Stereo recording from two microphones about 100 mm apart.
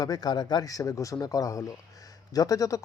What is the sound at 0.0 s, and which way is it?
Speech, 40° left (ahead or behind).